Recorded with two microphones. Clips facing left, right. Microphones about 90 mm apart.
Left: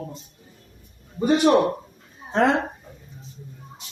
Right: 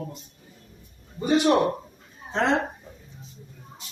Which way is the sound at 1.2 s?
50° left (ahead or behind).